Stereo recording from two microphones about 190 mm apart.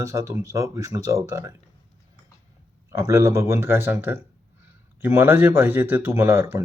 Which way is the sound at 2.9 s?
15° right (ahead or behind).